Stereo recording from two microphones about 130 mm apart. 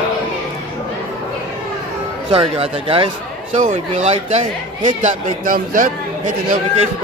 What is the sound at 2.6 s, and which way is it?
Speech, 45° right (ahead or behind).